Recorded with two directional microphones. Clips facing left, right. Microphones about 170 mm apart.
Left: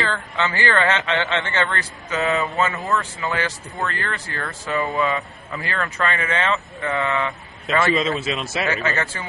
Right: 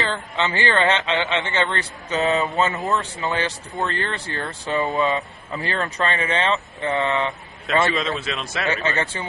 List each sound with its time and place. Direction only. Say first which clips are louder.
0.0 s speech: even; 20° right (ahead or behind)
7.8 s a man's voice: left 2 dB; centre (ahead or behind)
8.6 s speech: right 2 dB; 30° right (ahead or behind)